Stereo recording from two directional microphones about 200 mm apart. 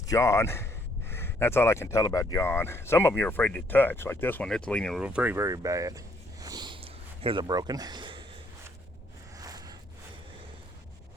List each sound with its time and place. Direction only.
0.1 s speech: 15° left (ahead or behind); by 6.0 s 15° right (ahead or behind)
6.4 s sniff: 20° right (ahead or behind)
9.4 s a sound: 20° right (ahead or behind)